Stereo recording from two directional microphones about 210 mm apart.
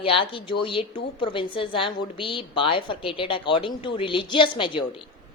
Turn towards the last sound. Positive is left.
turn(degrees=25)  # may be behind; listen again after turning